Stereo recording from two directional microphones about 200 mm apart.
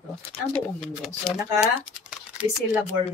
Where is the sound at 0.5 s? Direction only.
5° left (ahead or behind).